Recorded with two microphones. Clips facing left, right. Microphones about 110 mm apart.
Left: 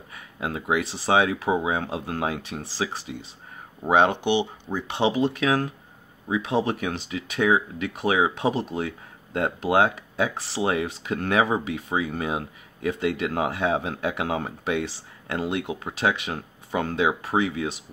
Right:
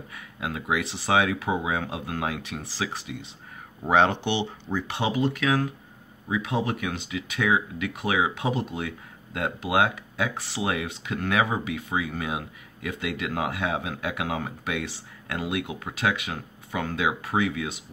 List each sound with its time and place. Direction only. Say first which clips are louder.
0.1 s speech: left 3 dB; 30° left (ahead or behind)
3.8 s speech: left 2 dB; 15° left (ahead or behind); by 17.8 s 30° left (ahead or behind)